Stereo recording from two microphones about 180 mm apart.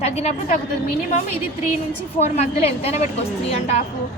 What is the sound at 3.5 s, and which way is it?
Speech, 35° left (ahead or behind).